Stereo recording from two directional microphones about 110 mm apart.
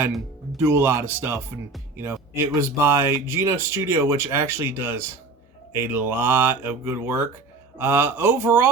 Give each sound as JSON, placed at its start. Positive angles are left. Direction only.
{"t": 0.6, "sound": "speech", "side_deg": -20}